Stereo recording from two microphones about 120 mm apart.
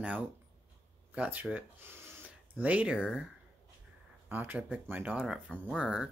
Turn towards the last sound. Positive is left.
turn(degrees=-10)  # may be behind; listen again after turning